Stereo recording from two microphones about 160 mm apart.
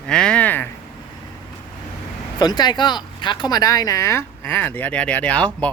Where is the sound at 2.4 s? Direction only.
25° left (ahead or behind); by 5.6 s 10° left (ahead or behind).